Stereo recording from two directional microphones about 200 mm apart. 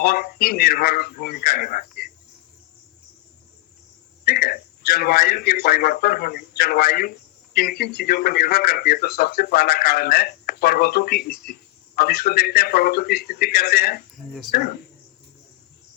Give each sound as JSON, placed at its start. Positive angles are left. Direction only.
{"t": 0.0, "sound": "speech", "side_deg": 50}
{"t": 4.3, "sound": "speech", "side_deg": 50}